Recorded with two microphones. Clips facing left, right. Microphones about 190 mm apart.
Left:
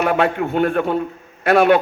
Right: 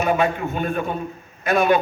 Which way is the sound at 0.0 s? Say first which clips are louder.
Left 2 dB; 65° left (ahead or behind).